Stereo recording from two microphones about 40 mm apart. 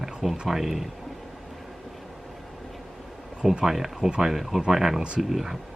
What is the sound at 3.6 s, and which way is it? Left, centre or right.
Speech, centre.